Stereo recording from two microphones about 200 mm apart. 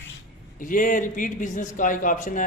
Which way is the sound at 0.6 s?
40° left (ahead or behind).